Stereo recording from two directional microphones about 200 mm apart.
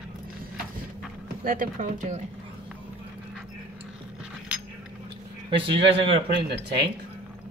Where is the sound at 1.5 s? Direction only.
40° right (ahead or behind).